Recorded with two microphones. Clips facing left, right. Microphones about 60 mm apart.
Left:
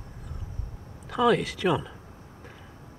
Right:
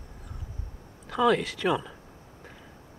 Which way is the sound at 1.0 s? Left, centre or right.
Centre.